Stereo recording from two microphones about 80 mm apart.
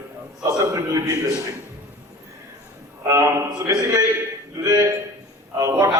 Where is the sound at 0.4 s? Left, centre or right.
Right.